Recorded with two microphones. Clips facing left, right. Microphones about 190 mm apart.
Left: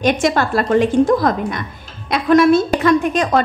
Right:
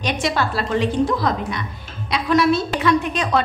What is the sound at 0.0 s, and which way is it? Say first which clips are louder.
A woman's voice: left 6 dB; 50° left (ahead or behind).